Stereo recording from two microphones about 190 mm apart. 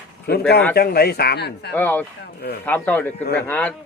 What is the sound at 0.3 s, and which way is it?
Speech, 55° left (ahead or behind).